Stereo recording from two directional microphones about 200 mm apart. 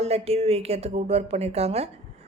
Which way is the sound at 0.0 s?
30° right (ahead or behind).